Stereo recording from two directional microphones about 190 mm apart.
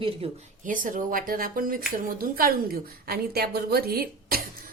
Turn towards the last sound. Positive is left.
turn(degrees=-50)  # may be behind; listen again after turning